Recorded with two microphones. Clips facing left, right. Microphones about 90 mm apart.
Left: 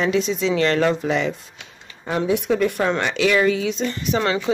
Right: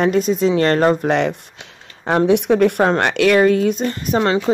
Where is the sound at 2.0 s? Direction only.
65° right (ahead or behind); by 4.2 s 45° right (ahead or behind).